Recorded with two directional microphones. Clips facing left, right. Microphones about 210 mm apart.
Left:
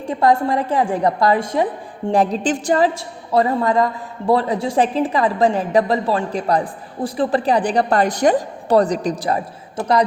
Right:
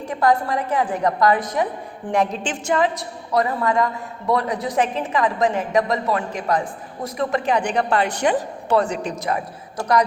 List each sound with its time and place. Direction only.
0.1 s a woman's voice: 30° left (ahead or behind)